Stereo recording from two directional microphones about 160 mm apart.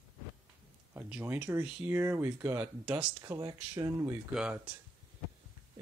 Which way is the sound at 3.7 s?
20° right (ahead or behind).